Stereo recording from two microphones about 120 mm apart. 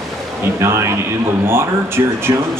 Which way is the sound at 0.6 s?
20° right (ahead or behind).